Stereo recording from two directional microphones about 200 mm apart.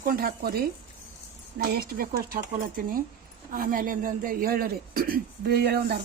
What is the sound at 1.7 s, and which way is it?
Speech, 50° right (ahead or behind).